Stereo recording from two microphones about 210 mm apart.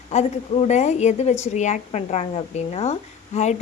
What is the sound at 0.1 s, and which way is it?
A woman's voice, 30° left (ahead or behind).